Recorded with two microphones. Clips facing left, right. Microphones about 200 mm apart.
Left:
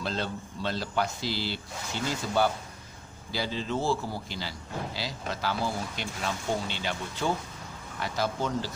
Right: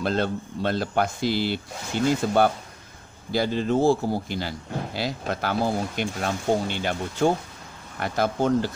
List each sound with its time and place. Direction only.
0.0 s speech: 55° right (ahead or behind)